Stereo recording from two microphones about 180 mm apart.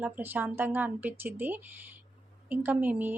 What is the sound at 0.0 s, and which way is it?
Speech, 10° right (ahead or behind).